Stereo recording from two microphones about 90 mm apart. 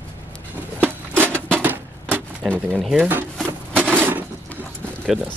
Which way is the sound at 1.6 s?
20° right (ahead or behind).